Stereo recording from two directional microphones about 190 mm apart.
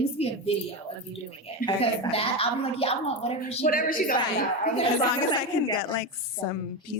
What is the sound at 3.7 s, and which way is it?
Speech, 50° left (ahead or behind).